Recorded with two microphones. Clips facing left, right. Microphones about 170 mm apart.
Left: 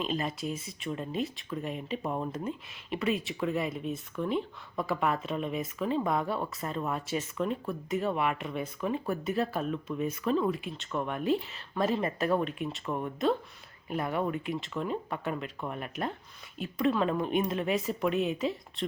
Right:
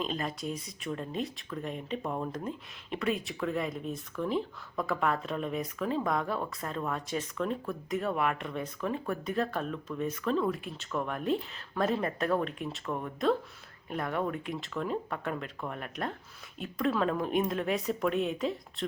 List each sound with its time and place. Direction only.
0.0 s speech: centre (ahead or behind)